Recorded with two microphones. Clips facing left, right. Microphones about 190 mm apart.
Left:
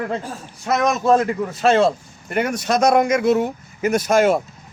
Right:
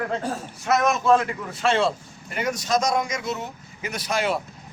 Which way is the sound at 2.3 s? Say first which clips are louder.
Left 4 dB; 60° left (ahead or behind).